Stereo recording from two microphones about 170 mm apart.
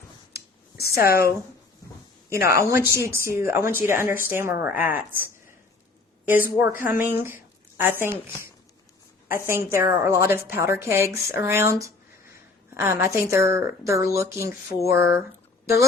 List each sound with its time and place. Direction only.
0.3 s a sound: 65° left (ahead or behind)
2.5 s a woman's voice: 15° right (ahead or behind)
6.2 s a woman's voice: 10° right (ahead or behind)
9.5 s a woman's voice: 15° right (ahead or behind)